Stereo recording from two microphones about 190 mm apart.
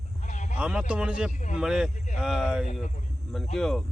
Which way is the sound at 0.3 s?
40° left (ahead or behind).